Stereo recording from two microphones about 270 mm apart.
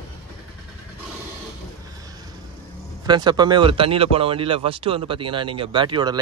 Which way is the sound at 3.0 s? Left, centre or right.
Centre.